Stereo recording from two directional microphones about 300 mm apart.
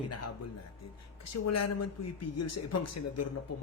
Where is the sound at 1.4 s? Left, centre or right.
Left.